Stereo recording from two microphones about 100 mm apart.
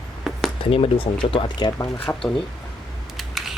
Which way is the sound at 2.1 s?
25° left (ahead or behind).